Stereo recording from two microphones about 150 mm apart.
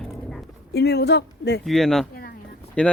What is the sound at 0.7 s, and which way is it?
Speech, 90° left.